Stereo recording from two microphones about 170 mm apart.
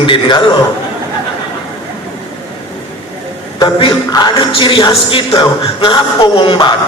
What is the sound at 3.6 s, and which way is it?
Speech, 25° left (ahead or behind).